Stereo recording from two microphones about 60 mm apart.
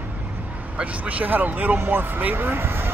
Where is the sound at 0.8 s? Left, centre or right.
Right.